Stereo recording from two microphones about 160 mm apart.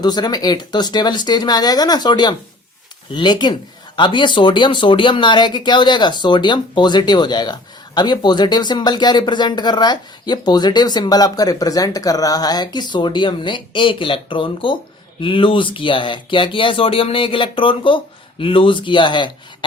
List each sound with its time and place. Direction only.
0.0 s speech: 25° left (ahead or behind)